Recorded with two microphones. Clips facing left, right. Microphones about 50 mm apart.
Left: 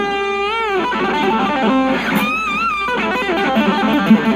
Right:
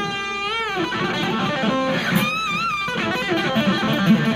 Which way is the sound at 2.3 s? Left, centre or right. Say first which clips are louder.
Left 5 dB; centre.